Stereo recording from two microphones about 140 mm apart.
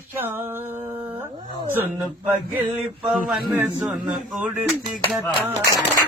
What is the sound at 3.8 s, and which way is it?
Speech, centre (ahead or behind).